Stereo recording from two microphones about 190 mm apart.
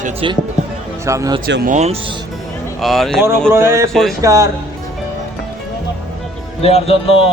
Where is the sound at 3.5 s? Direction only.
15° right (ahead or behind).